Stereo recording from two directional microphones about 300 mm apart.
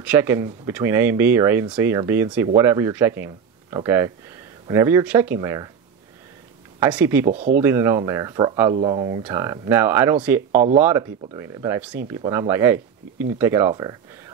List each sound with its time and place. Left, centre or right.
0.0 s speech: centre
6.8 s speech: centre
7.2 s speech: right
7.5 s speech: centre